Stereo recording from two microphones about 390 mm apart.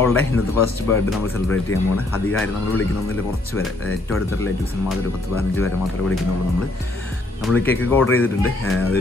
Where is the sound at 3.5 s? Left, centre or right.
Left.